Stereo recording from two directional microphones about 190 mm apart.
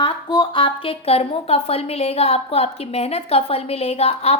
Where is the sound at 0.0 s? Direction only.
25° left (ahead or behind).